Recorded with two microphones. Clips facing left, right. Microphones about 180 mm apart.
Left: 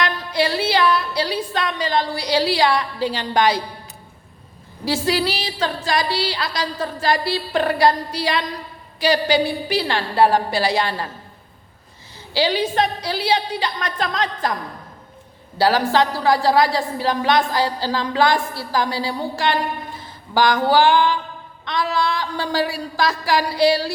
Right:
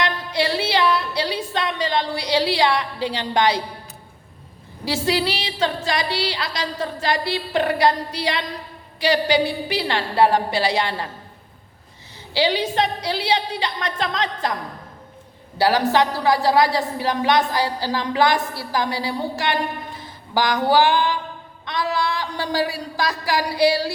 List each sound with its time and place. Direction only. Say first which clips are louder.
0.0 s a woman's voice: left 1 dB; 25° right (ahead or behind)
4.9 s a woman's voice: left 1 dB; 25° right (ahead or behind)
12.3 s a woman's voice: left 1 dB; 20° right (ahead or behind)
15.5 s a woman's voice: left 1 dB; 20° right (ahead or behind)